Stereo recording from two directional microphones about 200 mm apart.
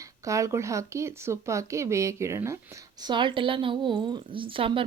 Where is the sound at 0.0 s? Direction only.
15° right (ahead or behind).